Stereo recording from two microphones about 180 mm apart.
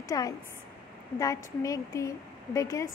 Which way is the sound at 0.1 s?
20° left (ahead or behind).